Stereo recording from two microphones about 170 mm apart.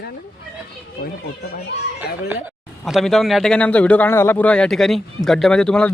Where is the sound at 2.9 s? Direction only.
Centre (ahead or behind).